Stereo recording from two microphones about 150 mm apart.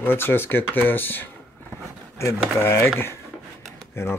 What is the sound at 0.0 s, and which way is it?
Speech, 15° left (ahead or behind).